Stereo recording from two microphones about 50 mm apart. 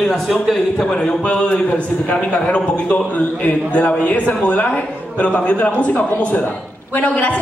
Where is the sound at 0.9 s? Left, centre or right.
Left.